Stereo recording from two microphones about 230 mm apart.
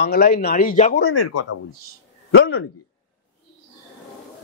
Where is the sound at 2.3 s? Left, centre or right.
Left.